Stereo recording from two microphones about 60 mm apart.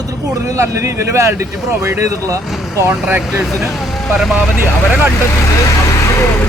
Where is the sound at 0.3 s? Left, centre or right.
Right.